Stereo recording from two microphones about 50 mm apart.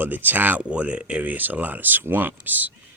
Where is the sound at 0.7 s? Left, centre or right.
Right.